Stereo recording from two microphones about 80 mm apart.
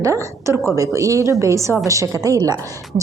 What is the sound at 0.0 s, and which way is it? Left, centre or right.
A woman's voice, right.